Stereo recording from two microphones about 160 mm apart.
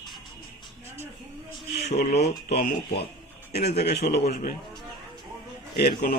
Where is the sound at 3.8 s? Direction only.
90° left.